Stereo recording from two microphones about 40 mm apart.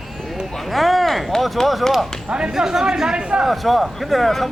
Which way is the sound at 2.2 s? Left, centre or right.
Right.